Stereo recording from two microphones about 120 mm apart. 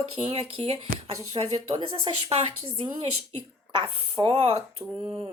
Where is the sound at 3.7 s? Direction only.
45° right (ahead or behind).